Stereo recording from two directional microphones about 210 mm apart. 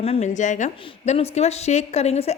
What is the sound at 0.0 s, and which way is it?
A woman's voice, 30° left (ahead or behind).